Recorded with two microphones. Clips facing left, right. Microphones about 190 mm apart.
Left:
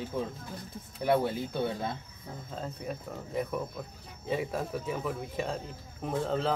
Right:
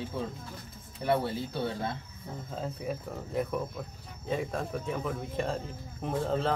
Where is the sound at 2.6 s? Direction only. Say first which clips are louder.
Right 3 dB; centre (ahead or behind).